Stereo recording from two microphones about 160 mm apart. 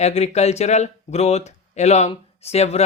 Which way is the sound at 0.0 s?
40° left (ahead or behind).